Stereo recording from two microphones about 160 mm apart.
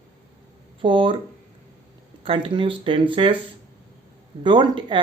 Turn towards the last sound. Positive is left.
turn(degrees=-30)  # may be behind; listen again after turning